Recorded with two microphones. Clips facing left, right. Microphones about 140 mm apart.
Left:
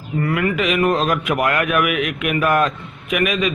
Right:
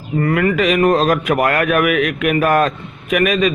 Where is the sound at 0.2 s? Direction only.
45° right (ahead or behind).